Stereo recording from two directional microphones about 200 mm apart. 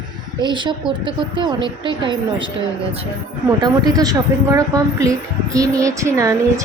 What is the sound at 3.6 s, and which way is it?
A woman's voice, 20° right (ahead or behind).